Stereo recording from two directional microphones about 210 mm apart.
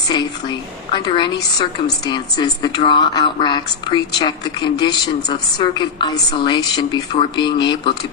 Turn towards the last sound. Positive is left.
turn(degrees=20)  # may be behind; listen again after turning